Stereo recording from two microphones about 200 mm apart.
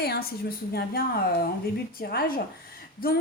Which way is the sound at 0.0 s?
50° left (ahead or behind).